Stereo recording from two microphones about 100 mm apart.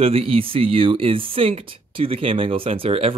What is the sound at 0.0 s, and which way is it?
Speech, 75° right (ahead or behind).